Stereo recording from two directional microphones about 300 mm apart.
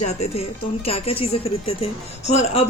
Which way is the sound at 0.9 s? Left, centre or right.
Centre.